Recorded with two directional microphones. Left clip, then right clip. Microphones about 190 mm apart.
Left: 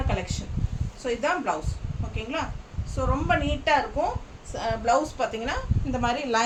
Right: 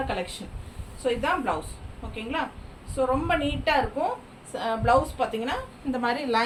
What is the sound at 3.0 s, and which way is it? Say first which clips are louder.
Speech: right 4 dB; 15° left (ahead or behind).